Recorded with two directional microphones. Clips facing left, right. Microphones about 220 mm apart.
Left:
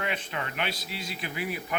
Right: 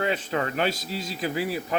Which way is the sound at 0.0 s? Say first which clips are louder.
Right 7 dB; 35° right (ahead or behind).